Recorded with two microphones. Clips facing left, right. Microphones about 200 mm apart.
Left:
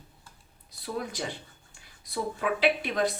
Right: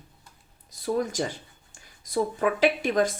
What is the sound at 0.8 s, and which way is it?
Speech, 45° right (ahead or behind).